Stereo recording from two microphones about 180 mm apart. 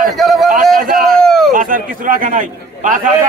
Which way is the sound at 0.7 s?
50° right (ahead or behind).